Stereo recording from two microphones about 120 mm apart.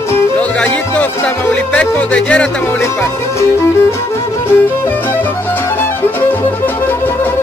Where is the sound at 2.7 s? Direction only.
20° left (ahead or behind).